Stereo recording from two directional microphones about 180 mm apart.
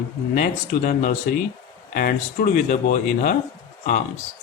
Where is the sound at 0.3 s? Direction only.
45° left (ahead or behind).